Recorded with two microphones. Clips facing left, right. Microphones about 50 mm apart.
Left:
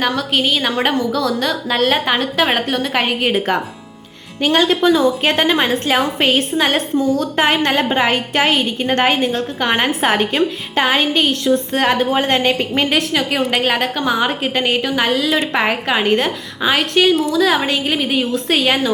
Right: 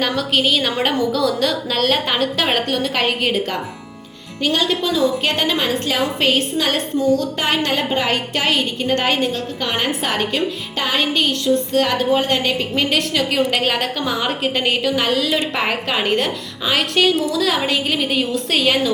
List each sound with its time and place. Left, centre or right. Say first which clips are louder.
0.0 s a woman's voice: left 1 dB; centre
3.3 s a woman's voice: left 4 dB; left
12.9 s a woman's voice: left 2 dB; centre